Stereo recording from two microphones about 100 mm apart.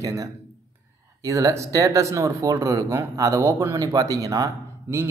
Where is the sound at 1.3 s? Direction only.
30° right (ahead or behind).